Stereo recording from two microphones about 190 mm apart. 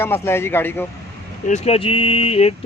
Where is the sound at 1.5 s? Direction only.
30° left (ahead or behind).